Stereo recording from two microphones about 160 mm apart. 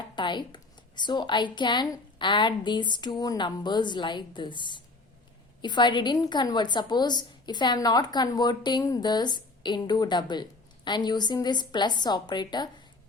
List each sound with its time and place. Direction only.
0.2 s a woman's voice: 30° left (ahead or behind)